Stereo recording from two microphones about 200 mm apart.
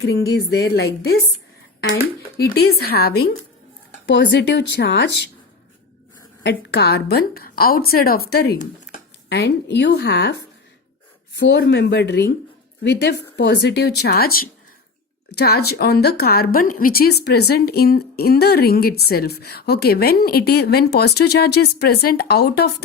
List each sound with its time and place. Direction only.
0.0 s speech: 65° left (ahead or behind)
2.4 s a woman's voice: 50° left (ahead or behind)
6.4 s a woman's voice: 55° left (ahead or behind)
9.3 s a woman's voice: 60° left (ahead or behind)